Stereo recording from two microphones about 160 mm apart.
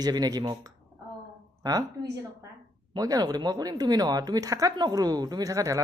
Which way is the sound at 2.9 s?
25° right (ahead or behind).